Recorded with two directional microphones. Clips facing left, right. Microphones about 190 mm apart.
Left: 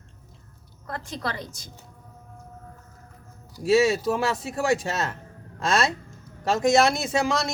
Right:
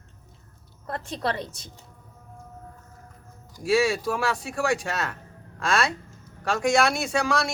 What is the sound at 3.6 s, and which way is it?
A man's voice, 20° left (ahead or behind).